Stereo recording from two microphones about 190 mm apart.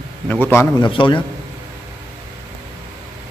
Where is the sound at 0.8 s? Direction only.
25° left (ahead or behind).